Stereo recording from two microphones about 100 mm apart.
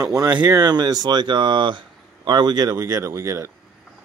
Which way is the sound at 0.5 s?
45° right (ahead or behind).